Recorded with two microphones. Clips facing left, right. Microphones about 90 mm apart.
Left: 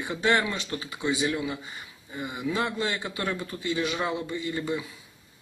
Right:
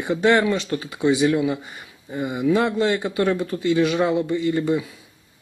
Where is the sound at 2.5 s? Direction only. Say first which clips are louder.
Right 9 dB; 55° right (ahead or behind).